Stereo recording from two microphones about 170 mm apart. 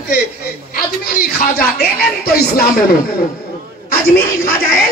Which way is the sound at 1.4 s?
65° left (ahead or behind).